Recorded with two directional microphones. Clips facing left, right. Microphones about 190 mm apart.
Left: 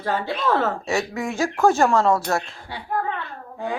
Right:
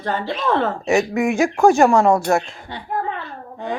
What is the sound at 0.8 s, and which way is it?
Speech, 15° right (ahead or behind).